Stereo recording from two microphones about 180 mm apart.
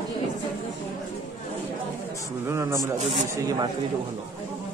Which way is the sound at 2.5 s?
15° right (ahead or behind).